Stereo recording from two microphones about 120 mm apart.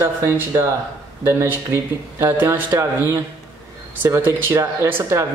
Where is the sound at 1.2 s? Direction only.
20° right (ahead or behind).